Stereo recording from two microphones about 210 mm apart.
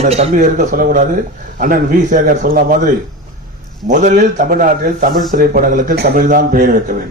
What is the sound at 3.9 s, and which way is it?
A man's voice, 35° right (ahead or behind).